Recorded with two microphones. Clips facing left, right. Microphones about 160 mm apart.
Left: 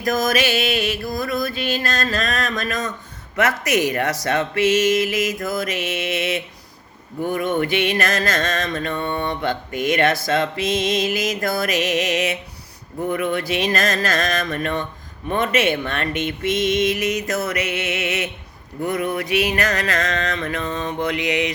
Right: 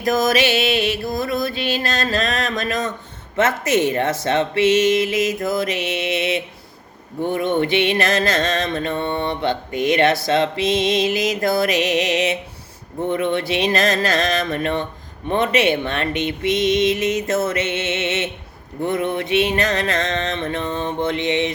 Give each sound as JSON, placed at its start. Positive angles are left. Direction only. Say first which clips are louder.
{"t": 0.0, "sound": "speech", "louder": "right 2 dB", "side_deg": -25}